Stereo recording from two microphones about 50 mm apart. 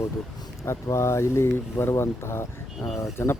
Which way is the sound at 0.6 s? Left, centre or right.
Left.